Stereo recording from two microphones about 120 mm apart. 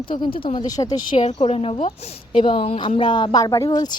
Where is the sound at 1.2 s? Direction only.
55° left (ahead or behind).